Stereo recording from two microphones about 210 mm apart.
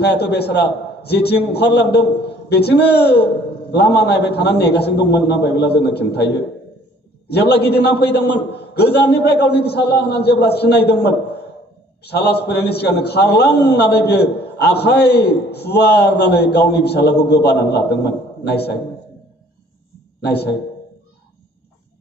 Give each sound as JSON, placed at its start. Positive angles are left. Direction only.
{"t": 0.0, "sound": "a man's voice", "side_deg": 50}
{"t": 20.2, "sound": "a man's voice", "side_deg": 50}